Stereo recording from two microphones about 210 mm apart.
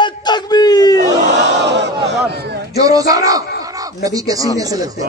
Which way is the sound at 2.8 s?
15° right (ahead or behind).